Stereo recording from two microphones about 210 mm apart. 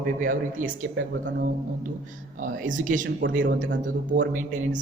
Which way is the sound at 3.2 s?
60° right (ahead or behind).